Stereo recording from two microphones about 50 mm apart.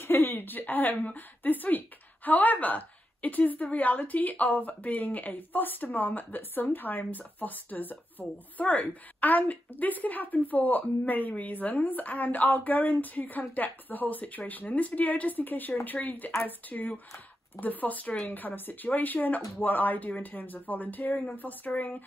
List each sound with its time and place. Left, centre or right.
0.0 s a woman's voice: left